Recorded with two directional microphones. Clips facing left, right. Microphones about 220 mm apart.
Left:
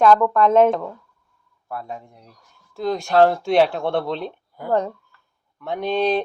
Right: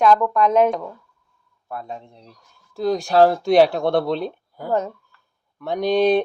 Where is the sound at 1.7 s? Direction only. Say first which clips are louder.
Even; 20° right (ahead or behind); by 4.2 s 40° right (ahead or behind).